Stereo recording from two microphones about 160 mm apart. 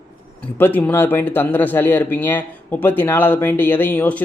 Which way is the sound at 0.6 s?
10° left (ahead or behind).